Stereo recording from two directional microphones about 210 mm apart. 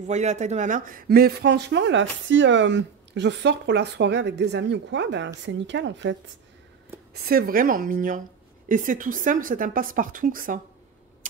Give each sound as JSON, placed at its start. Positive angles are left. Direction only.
{"t": 0.0, "sound": "speech", "side_deg": -35}
{"t": 7.2, "sound": "speech", "side_deg": -45}